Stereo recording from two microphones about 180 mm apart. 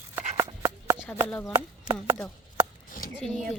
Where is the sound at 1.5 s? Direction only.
20° right (ahead or behind).